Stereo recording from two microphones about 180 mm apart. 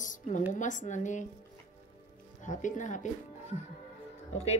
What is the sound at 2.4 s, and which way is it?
A woman's voice, 45° left (ahead or behind).